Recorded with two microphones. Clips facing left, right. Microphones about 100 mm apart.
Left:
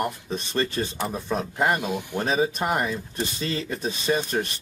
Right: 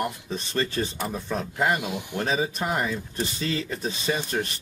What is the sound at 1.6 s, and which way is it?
Speech, 30° left (ahead or behind).